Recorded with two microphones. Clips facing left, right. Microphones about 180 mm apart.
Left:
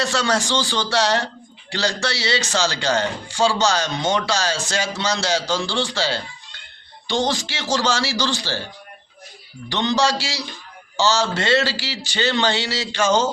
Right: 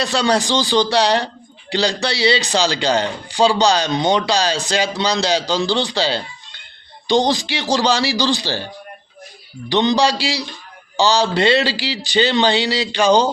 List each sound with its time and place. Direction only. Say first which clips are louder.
0.0 s speech: right 4 dB; 15° right (ahead or behind)
9.6 s speech: right 4 dB; 15° right (ahead or behind)